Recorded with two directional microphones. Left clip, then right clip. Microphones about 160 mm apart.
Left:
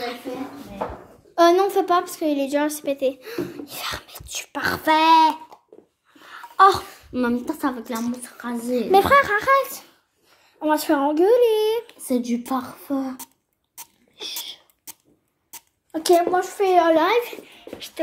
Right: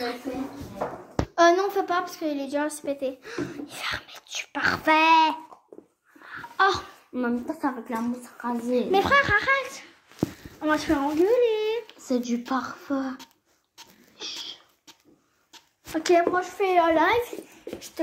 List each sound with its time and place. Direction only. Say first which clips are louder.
1.3 s a woman's voice: left 4 dB; 40° left (ahead or behind)
6.2 s a sound: left 7 dB; 45° left (ahead or behind)
7.2 s a woman's voice: left 4 dB; 80° left; by 11.8 s 25° left (ahead or behind)
11.9 s a woman's voice: left 3 dB; 90° left
12.7 s speech: left 2 dB; 40° left (ahead or behind)
15.9 s a child's voice: left 3 dB; 10° left (ahead or behind)
18.0 s speech: left 4 dB; 5° left (ahead or behind)